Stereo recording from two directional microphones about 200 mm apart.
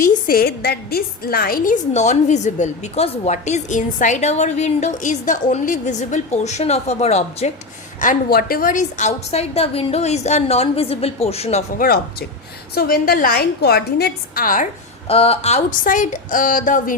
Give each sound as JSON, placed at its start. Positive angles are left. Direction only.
{"t": 0.0, "sound": "a woman's voice", "side_deg": 45}
{"t": 8.0, "sound": "a woman's voice", "side_deg": 45}
{"t": 11.8, "sound": "a woman's voice", "side_deg": 45}
{"t": 15.0, "sound": "a woman's voice", "side_deg": 30}